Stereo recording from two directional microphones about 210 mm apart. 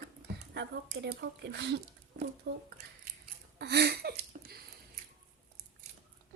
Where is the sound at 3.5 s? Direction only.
55° right (ahead or behind).